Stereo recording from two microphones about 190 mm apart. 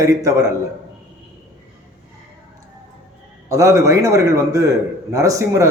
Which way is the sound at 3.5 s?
15° right (ahead or behind).